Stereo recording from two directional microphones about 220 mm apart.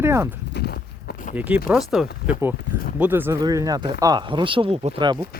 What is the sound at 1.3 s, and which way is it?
Speech, 5° right (ahead or behind).